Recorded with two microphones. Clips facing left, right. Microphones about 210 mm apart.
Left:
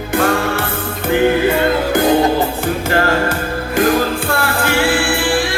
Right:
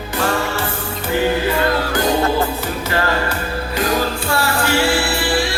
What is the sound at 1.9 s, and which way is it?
Music, 55° left (ahead or behind).